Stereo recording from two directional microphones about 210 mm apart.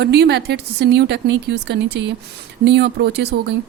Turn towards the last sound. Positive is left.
turn(degrees=-55)  # may be behind; listen again after turning